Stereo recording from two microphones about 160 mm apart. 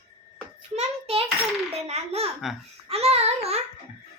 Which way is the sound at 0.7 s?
35° right (ahead or behind).